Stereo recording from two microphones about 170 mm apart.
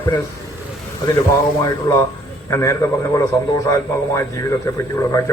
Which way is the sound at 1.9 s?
25° left (ahead or behind).